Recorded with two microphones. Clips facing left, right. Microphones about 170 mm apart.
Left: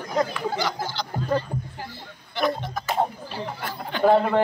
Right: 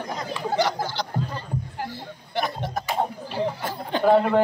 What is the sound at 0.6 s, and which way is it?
Speech, 70° right (ahead or behind).